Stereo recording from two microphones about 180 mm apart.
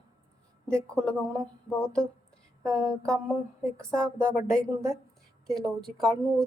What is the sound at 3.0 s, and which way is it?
A woman's voice, 5° left (ahead or behind).